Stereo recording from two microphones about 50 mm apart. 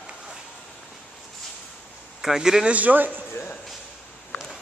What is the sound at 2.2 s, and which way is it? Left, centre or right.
Speech, centre.